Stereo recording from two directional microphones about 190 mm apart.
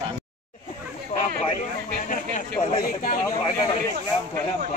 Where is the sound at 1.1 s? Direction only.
40° left (ahead or behind).